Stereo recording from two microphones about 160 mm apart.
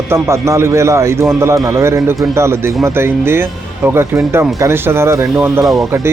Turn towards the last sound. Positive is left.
turn(degrees=0)  # may be behind; listen again after turning